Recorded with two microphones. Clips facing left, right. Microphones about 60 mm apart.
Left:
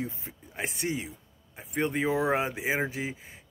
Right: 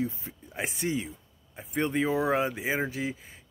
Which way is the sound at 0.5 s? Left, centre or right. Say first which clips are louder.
Right 1 dB; centre.